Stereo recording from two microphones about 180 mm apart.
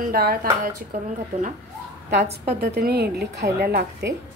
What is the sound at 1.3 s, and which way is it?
Speech, 35° right (ahead or behind).